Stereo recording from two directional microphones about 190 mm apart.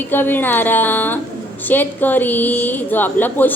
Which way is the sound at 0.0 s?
10° left (ahead or behind).